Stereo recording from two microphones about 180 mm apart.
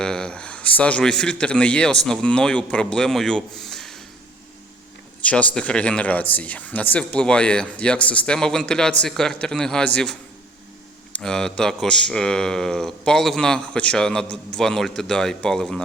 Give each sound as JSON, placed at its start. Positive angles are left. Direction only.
{"t": 0.0, "sound": "a man's voice", "side_deg": 5}
{"t": 5.2, "sound": "speech", "side_deg": 5}